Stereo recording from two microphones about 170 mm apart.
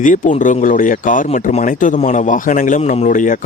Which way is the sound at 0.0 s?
50° left (ahead or behind).